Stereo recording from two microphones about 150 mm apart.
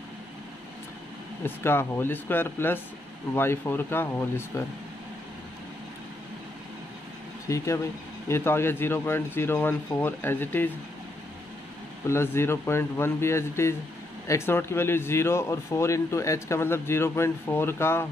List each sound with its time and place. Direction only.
1.4 s speech: 15° left (ahead or behind)
7.4 s speech: 20° left (ahead or behind)
12.1 s speech: 15° left (ahead or behind)